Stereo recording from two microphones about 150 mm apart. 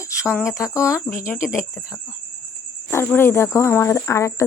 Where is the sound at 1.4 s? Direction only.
5° right (ahead or behind).